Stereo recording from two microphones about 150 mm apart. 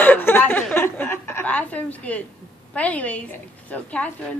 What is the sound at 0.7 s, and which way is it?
Chuckle, 15° left (ahead or behind).